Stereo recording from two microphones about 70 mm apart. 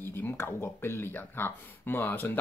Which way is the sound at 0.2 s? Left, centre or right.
Left.